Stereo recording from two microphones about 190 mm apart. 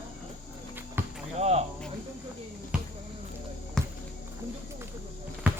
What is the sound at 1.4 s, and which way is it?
Cricket, 35° right (ahead or behind).